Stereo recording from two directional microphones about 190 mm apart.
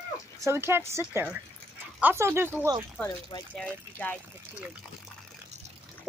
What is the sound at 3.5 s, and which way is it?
Speech, 5° left (ahead or behind).